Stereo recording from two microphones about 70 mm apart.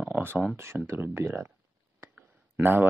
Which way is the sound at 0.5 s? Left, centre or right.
Right.